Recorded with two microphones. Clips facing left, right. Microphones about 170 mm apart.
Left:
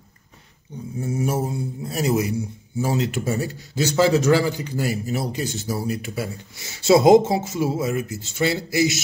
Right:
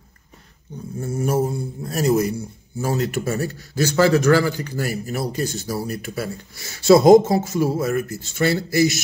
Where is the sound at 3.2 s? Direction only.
20° left (ahead or behind).